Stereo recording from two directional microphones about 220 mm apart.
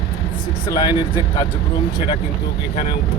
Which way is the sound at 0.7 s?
20° left (ahead or behind).